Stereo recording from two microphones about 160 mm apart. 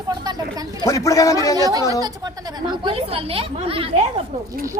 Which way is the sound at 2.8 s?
35° right (ahead or behind).